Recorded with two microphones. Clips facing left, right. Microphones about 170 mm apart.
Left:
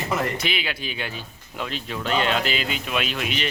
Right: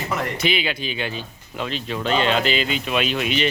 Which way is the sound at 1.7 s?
90° right.